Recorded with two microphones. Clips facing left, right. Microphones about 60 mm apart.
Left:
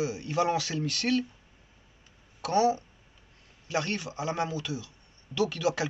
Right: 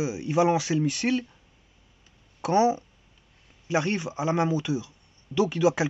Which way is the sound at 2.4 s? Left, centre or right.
Right.